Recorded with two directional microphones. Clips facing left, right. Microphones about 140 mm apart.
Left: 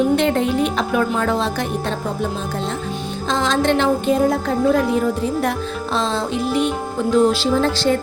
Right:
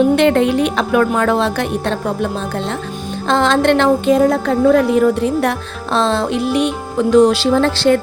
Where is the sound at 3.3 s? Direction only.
65° right (ahead or behind); by 4.4 s 85° right.